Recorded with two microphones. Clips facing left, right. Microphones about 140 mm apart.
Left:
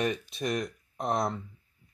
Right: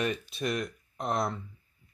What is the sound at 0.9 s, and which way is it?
Speech, centre (ahead or behind).